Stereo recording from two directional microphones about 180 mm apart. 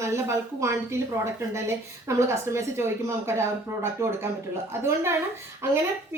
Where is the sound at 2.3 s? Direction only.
15° right (ahead or behind).